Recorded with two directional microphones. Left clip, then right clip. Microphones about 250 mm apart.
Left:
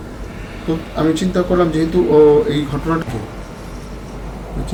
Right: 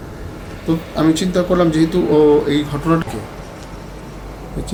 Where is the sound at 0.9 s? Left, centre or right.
Right.